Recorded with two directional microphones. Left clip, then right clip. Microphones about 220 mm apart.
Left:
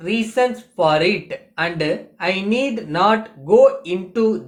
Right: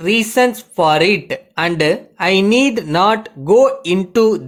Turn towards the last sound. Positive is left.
turn(degrees=-50)  # may be behind; listen again after turning